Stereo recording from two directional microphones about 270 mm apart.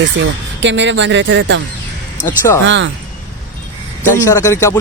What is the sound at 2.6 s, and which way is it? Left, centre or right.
Speech, right.